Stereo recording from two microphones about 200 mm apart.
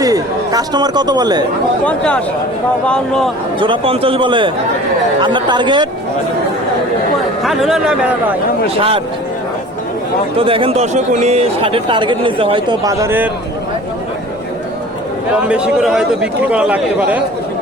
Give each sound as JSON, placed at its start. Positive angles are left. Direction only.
{"t": 0.0, "sound": "a man's voice", "side_deg": -20}
{"t": 1.8, "sound": "a man's voice", "side_deg": 5}
{"t": 3.6, "sound": "speech", "side_deg": -25}
{"t": 7.4, "sound": "a man's voice", "side_deg": 0}
{"t": 10.3, "sound": "speech", "side_deg": -25}
{"t": 15.4, "sound": "a man's voice", "side_deg": -5}